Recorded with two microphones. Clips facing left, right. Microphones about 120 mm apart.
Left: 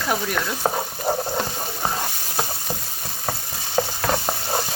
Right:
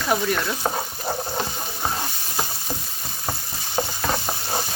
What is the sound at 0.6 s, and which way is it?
Stir, 20° left (ahead or behind).